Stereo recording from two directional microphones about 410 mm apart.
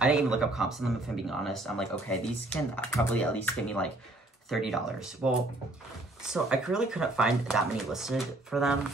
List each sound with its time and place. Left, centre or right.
0.0 s speech: centre
6.2 s speech: centre